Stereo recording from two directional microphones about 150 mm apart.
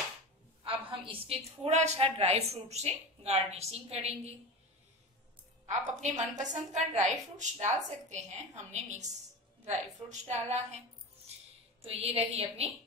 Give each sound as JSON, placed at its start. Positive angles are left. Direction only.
{"t": 0.7, "sound": "a woman's voice", "side_deg": -35}
{"t": 5.7, "sound": "a woman's voice", "side_deg": -55}
{"t": 9.7, "sound": "a woman's voice", "side_deg": -50}
{"t": 11.8, "sound": "a woman's voice", "side_deg": -40}